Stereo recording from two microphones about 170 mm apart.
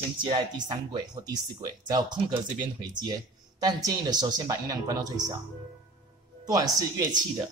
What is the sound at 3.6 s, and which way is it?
Speech, 20° right (ahead or behind).